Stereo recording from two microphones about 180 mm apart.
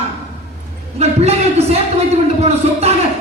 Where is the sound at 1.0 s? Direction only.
35° right (ahead or behind).